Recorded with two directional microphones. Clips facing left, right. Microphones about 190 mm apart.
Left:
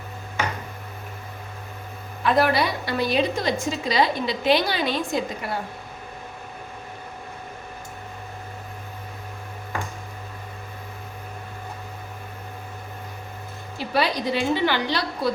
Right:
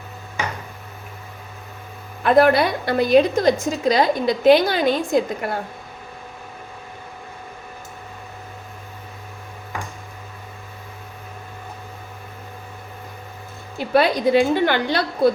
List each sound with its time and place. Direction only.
2.2 s a woman's voice: 55° right (ahead or behind)
13.7 s a woman's voice: 50° right (ahead or behind)